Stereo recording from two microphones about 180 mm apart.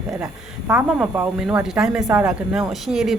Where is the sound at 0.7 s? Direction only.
5° right (ahead or behind).